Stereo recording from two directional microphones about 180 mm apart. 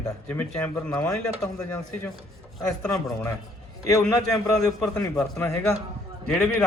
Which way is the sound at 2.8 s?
5° left (ahead or behind).